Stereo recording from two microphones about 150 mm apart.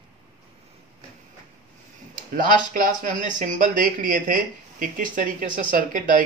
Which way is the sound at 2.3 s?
65° right (ahead or behind).